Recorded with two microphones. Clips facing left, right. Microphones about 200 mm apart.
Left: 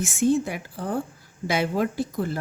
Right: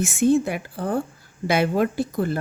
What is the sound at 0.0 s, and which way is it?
Speech, 60° right (ahead or behind).